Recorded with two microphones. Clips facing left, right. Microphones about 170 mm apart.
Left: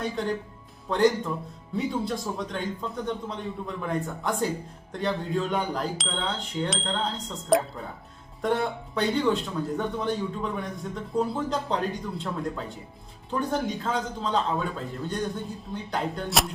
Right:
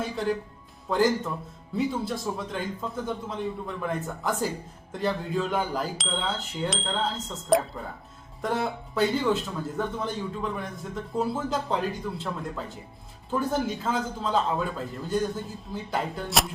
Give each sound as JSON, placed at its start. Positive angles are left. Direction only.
{"t": 0.0, "sound": "a man's voice", "side_deg": -5}